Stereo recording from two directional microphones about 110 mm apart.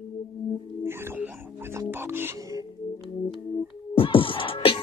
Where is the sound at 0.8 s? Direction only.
20° right (ahead or behind).